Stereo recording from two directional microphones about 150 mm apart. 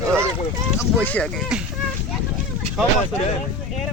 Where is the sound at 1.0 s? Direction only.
10° left (ahead or behind).